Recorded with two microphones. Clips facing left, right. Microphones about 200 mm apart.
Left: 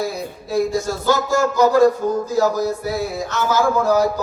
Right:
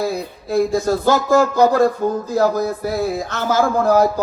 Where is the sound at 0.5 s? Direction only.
55° right (ahead or behind).